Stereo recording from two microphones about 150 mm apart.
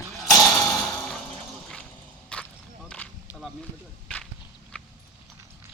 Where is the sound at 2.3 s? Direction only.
10° left (ahead or behind).